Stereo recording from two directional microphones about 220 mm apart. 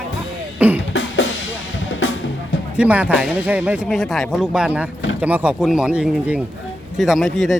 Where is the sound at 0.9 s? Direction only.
60° left (ahead or behind).